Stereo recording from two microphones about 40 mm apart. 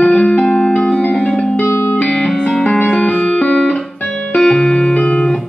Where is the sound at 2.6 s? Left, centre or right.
Left.